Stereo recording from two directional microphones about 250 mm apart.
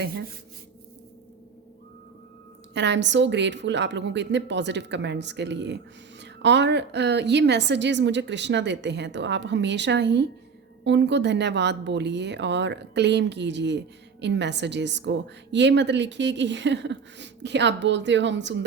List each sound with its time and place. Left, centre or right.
2.7 s speech: right